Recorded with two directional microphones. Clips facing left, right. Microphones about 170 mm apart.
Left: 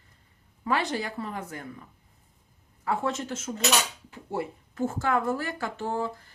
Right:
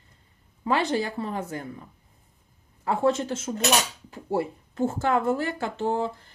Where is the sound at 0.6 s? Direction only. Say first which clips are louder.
Right 4 dB; 25° right (ahead or behind).